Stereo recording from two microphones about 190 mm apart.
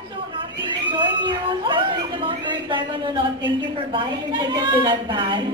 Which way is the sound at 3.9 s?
25° right (ahead or behind).